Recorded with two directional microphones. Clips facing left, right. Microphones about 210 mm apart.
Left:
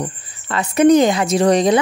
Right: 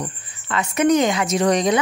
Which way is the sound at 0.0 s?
35° left (ahead or behind).